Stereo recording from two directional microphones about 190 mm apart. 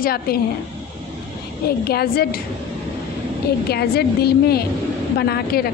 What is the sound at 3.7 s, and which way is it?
A woman's voice, 55° left (ahead or behind).